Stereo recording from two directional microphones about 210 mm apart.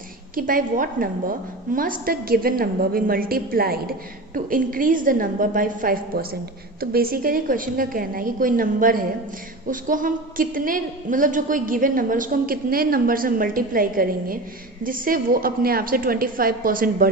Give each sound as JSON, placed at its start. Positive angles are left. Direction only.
{"t": 0.3, "sound": "a woman's voice", "side_deg": -40}